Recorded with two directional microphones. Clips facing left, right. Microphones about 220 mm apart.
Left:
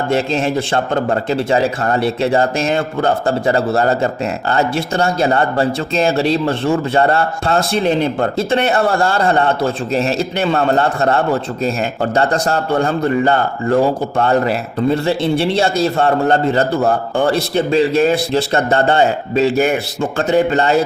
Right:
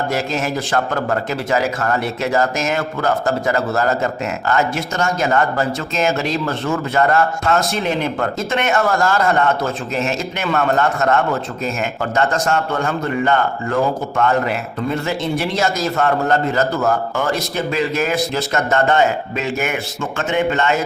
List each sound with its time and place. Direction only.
0.1 s a man's voice: 30° left (ahead or behind)